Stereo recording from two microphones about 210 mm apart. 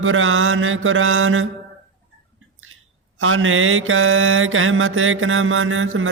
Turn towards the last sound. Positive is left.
turn(degrees=-70)  # may be behind; listen again after turning